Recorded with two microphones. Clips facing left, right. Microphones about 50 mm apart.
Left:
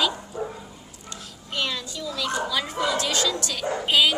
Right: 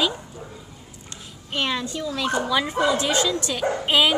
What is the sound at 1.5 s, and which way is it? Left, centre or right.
A child's voice, right.